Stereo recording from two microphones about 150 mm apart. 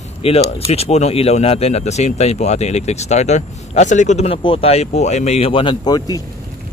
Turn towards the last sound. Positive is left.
turn(degrees=25)  # may be behind; listen again after turning